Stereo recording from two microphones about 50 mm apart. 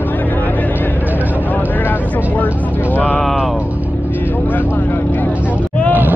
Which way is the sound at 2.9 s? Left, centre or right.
Left.